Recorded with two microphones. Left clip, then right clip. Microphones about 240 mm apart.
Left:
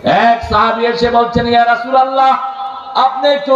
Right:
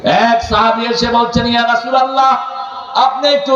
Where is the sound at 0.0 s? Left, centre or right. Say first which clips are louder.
Left 1 dB; right.